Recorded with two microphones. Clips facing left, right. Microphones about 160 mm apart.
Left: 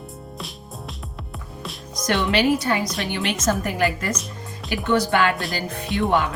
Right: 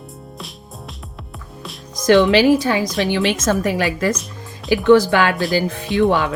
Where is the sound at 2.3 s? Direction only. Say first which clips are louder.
Right 6 dB; 90° right.